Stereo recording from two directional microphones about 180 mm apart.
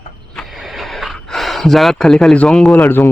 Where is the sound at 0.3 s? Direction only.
Centre (ahead or behind).